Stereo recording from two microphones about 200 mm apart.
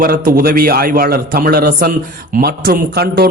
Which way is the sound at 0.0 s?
45° right (ahead or behind).